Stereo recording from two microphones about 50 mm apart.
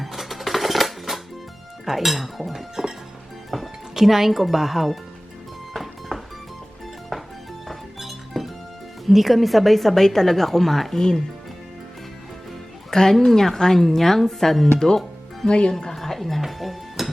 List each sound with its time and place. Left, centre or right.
0.0 s music: centre
1.8 s a woman's voice: centre
5.7 s music: centre
9.0 s a woman's voice: centre
12.9 s a woman's voice: centre
15.7 s music: centre